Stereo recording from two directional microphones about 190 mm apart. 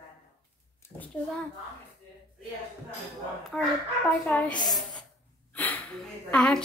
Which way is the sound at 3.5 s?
5° left (ahead or behind).